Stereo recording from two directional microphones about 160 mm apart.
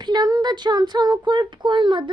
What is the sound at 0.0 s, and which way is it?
Speech, 25° right (ahead or behind).